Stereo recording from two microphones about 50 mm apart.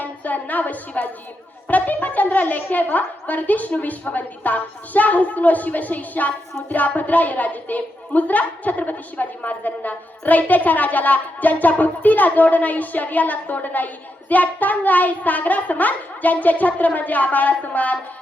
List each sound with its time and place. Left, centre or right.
0.0 s a woman's voice: left